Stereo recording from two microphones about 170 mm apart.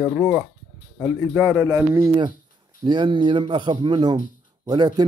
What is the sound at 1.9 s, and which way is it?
Speech, 20° right (ahead or behind).